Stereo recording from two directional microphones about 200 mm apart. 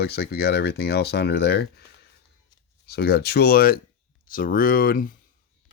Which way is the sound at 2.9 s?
55° left (ahead or behind).